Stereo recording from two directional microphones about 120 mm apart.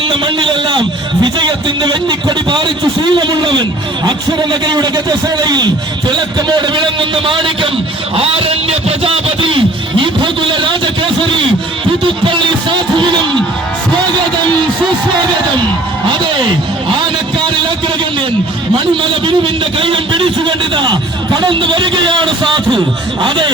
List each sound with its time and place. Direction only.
0.0 s a man's voice: 45° right (ahead or behind)
8.1 s a sound: 55° right (ahead or behind)
12.0 s music: 45° right (ahead or behind)
19.2 s a man's voice: 45° right (ahead or behind)